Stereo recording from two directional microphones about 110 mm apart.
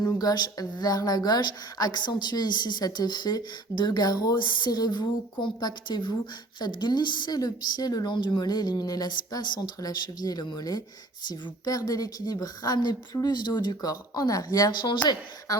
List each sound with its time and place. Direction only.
0.0 s a woman's voice: 35° left (ahead or behind)